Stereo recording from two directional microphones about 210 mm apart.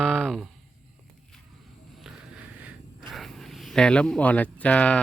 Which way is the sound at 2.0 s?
5° right (ahead or behind).